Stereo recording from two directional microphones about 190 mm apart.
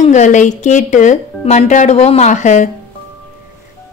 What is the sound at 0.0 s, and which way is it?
Speech, 40° left (ahead or behind).